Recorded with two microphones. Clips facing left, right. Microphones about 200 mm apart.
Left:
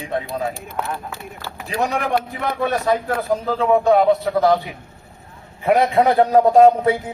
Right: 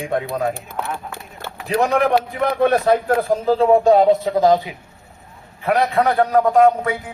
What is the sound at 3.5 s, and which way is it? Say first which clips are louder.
Speech: right 3 dB; 35° right (ahead or behind).